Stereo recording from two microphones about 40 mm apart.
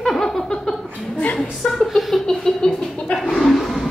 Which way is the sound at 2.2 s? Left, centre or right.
Centre.